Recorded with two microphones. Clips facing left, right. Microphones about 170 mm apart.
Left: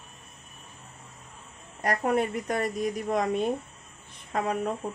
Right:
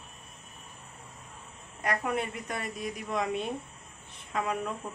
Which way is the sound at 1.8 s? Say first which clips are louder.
Left 5 dB; 40° left (ahead or behind).